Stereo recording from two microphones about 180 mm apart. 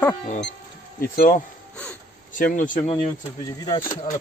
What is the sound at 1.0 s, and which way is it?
Speech, 50° left (ahead or behind).